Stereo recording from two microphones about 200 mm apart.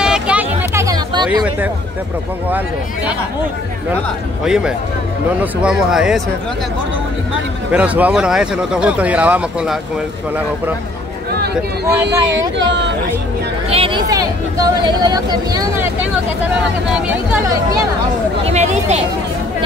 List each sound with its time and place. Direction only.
0.0 s hubbub: 5° right (ahead or behind); by 1.4 s 20° right (ahead or behind)
4.5 s speech: 5° right (ahead or behind)
7.7 s speech: 5° right (ahead or behind)
12.5 s speech: 65° right (ahead or behind)
13.7 s speech: 25° right (ahead or behind); by 16.1 s 10° right (ahead or behind)
18.4 s speech: 35° right (ahead or behind)